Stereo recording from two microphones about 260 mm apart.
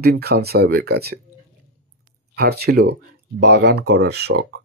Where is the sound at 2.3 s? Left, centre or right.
Right.